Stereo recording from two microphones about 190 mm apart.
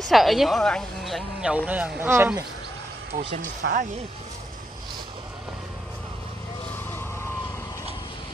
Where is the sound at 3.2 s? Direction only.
40° right (ahead or behind).